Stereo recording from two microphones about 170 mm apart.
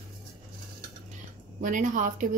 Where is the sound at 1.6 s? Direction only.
50° right (ahead or behind).